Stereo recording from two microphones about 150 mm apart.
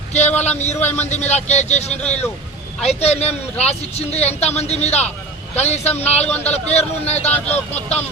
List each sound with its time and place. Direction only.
0.1 s a man's voice: 50° left (ahead or behind)